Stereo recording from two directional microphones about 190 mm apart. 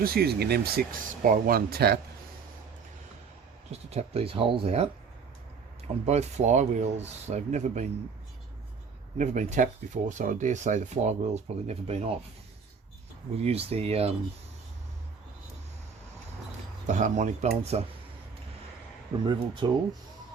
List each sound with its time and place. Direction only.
0.0 s speech: 55° right (ahead or behind)
3.7 s speech: 35° right (ahead or behind)
6.1 s speech: 35° right (ahead or behind)
9.1 s speech: 40° right (ahead or behind)
13.3 s speech: 30° right (ahead or behind)
16.8 s speech: 40° right (ahead or behind)
19.2 s speech: 25° right (ahead or behind)